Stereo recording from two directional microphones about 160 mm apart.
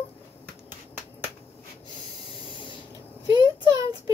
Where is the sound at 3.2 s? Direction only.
25° right (ahead or behind).